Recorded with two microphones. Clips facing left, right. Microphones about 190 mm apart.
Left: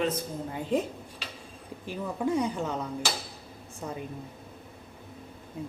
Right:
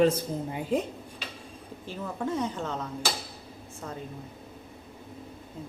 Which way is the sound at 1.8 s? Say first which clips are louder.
Left 3 dB; 15° left (ahead or behind).